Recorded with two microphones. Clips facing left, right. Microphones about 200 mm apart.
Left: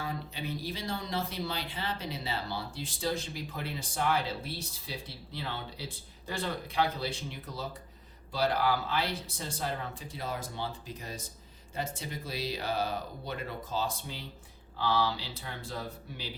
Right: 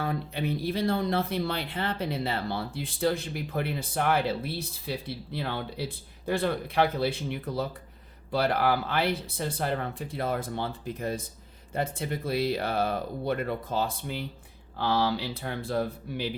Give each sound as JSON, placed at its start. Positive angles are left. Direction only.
{"t": 0.0, "sound": "speech", "side_deg": -55}